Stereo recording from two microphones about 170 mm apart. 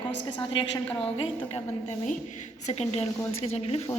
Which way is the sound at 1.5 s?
40° left (ahead or behind).